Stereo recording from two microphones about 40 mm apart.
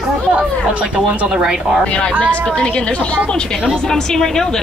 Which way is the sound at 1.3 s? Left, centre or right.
Centre.